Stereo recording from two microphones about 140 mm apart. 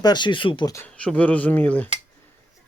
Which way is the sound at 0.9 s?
10° left (ahead or behind).